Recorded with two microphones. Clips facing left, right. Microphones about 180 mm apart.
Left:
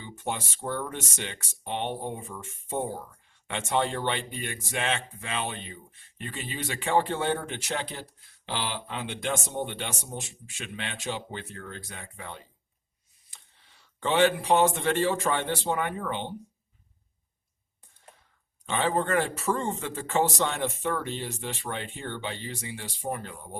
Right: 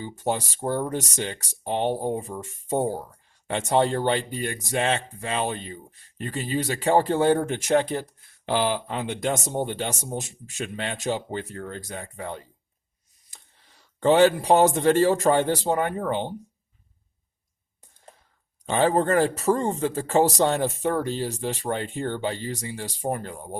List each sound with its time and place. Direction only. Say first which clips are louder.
0.0 s speech: right 7 dB; 40° right (ahead or behind)
18.6 s speech: right 6 dB; 40° right (ahead or behind)